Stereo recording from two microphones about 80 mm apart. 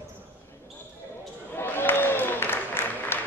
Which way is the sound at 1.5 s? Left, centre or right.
Left.